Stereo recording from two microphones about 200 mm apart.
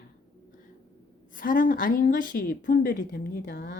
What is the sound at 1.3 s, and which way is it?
A woman's voice, 45° left (ahead or behind).